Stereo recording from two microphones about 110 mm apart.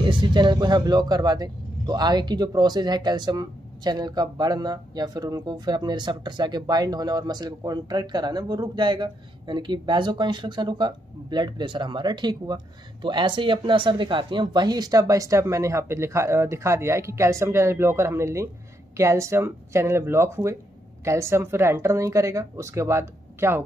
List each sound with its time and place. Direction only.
0.0 s speech: 45° right (ahead or behind); by 23.6 s 25° right (ahead or behind)